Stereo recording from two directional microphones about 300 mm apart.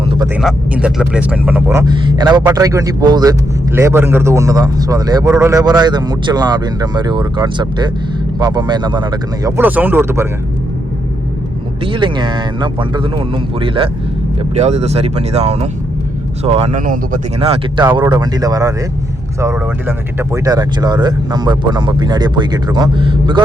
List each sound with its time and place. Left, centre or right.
0.0 s a sound: centre
0.3 s speech: centre
11.9 s speech: centre